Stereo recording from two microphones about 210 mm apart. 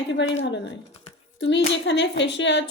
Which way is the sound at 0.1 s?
60° left (ahead or behind).